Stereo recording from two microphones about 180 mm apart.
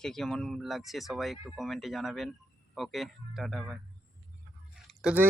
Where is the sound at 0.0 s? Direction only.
Centre (ahead or behind).